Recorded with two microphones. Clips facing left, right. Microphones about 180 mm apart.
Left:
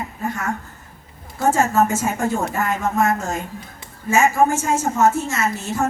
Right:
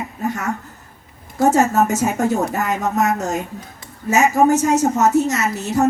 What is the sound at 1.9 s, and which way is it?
A woman's voice, 40° right (ahead or behind).